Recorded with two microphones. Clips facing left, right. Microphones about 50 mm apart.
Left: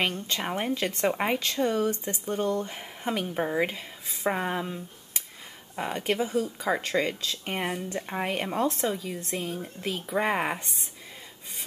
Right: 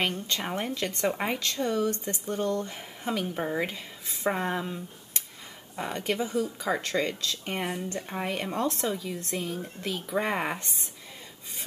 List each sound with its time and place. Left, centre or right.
0.3 s speech: centre
8.5 s speech: centre